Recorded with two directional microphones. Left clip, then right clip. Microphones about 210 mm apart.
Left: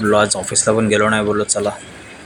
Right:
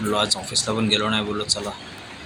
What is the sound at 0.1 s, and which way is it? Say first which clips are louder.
Speech: left 6 dB; 20° left (ahead or behind).